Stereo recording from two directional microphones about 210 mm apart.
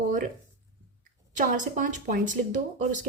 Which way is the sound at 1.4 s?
40° right (ahead or behind).